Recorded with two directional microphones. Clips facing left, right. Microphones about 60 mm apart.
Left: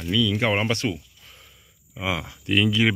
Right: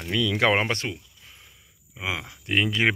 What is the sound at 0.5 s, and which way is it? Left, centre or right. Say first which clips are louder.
Speech: left 1 dB; right.